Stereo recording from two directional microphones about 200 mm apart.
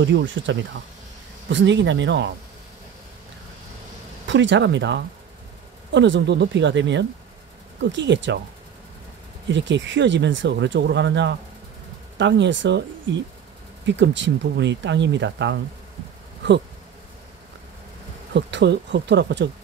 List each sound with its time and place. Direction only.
0.0 s speech: 65° right (ahead or behind)
4.3 s speech: 65° right (ahead or behind)
9.5 s speech: 65° right (ahead or behind)
13.8 s speech: 65° right (ahead or behind)
18.3 s speech: 60° right (ahead or behind)